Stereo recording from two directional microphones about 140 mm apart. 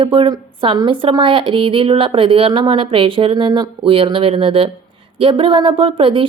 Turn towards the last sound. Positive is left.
turn(degrees=-35)  # may be behind; listen again after turning